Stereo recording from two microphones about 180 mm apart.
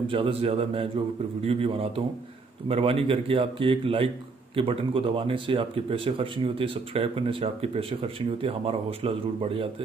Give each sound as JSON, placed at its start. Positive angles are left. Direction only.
{"t": 0.1, "sound": "speech", "side_deg": -30}